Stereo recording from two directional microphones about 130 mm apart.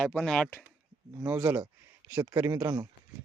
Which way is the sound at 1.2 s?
10° right (ahead or behind).